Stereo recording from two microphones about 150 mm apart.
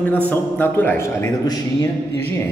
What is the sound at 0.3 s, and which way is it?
A man's voice, 10° left (ahead or behind).